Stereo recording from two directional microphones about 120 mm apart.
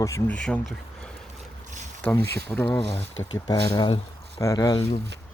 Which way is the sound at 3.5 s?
35° left (ahead or behind).